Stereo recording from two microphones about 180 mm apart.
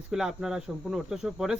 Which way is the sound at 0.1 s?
5° right (ahead or behind).